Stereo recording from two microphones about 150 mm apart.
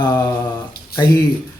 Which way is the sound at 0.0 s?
25° left (ahead or behind).